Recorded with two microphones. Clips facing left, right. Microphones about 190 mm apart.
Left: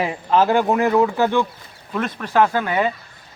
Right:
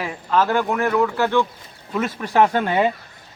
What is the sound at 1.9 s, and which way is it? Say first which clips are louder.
Speech: right 1 dB; 5° right (ahead or behind).